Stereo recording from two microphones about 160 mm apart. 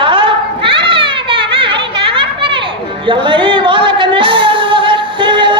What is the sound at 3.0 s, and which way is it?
Music, 30° right (ahead or behind).